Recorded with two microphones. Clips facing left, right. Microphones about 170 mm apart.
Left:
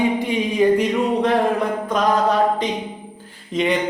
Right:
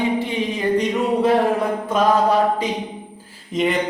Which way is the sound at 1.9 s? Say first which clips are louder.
Right 2 dB; 10° right (ahead or behind).